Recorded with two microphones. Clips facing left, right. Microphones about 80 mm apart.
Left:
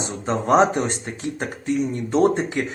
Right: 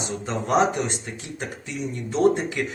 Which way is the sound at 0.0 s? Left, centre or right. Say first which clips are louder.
Left 4 dB; left.